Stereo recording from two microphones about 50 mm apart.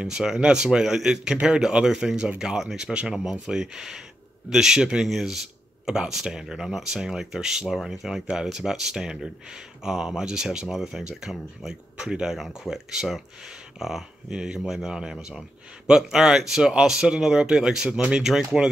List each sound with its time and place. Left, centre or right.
0.0 s speech: centre
18.2 s speech: centre